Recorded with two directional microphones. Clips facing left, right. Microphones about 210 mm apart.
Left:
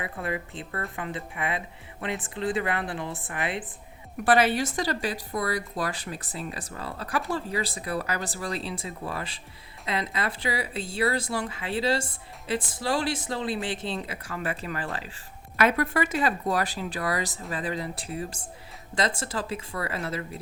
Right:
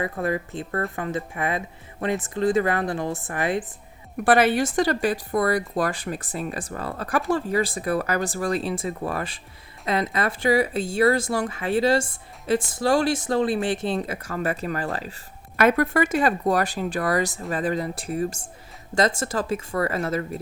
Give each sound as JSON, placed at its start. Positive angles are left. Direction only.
{"t": 0.0, "sound": "speech", "side_deg": -45}